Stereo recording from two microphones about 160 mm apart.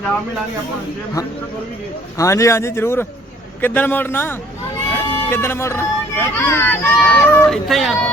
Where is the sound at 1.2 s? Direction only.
20° left (ahead or behind).